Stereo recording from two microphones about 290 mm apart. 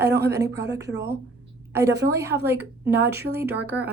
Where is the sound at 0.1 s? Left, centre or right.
Right.